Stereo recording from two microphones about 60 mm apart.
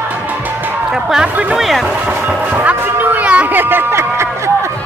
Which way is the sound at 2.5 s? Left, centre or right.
Right.